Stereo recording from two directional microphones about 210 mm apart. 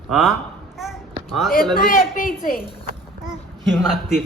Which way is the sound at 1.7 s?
40° left (ahead or behind).